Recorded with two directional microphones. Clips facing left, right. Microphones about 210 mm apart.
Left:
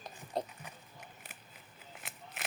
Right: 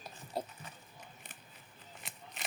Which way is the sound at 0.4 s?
5° right (ahead or behind).